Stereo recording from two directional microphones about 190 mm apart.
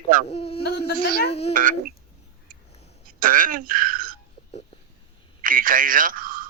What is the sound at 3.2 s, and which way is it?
Speech, 45° right (ahead or behind).